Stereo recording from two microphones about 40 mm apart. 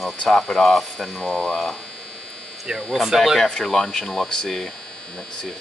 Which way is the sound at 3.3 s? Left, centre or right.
Centre.